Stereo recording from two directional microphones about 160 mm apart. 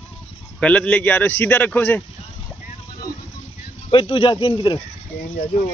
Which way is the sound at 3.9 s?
30° left (ahead or behind).